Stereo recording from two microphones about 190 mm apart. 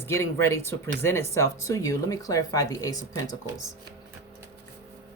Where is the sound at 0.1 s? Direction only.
15° left (ahead or behind).